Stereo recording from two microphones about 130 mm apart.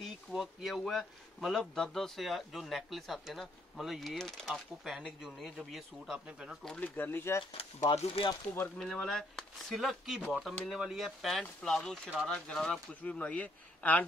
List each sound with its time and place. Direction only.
0.0 s speech: 5° right (ahead or behind)
6.6 s speech: 10° left (ahead or behind)
7.9 s speech: 50° left (ahead or behind)
8.7 s speech: 5° left (ahead or behind)